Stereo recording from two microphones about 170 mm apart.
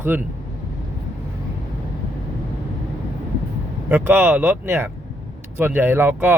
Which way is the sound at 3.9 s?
10° right (ahead or behind).